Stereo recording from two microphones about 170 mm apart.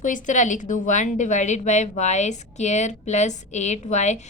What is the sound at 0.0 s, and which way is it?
A woman's voice, 50° left (ahead or behind).